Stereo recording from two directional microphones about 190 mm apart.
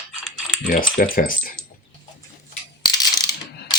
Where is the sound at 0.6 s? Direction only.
45° left (ahead or behind).